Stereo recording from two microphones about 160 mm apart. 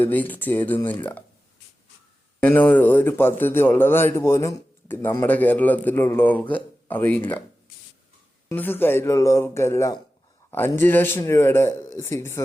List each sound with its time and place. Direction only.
0.0 s a man's voice: 10° left (ahead or behind)
2.4 s a man's voice: 10° left (ahead or behind)
8.4 s a man's voice: 10° left (ahead or behind)